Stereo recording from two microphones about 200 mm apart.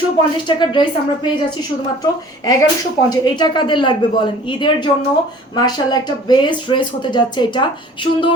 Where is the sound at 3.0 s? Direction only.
20° left (ahead or behind).